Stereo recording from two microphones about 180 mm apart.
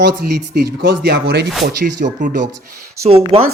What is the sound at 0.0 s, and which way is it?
Speech, 65° right (ahead or behind).